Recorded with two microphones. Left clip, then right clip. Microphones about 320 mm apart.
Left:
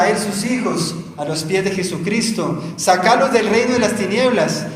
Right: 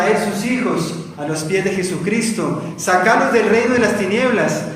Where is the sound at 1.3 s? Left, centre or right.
Centre.